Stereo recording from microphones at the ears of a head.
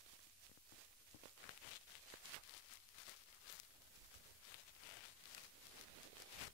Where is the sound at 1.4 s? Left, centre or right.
Left.